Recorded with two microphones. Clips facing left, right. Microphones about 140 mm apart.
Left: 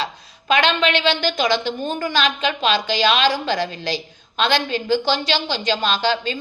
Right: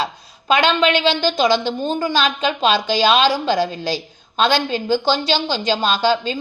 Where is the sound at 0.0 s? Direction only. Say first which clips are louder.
Right 3 dB; 40° right (ahead or behind).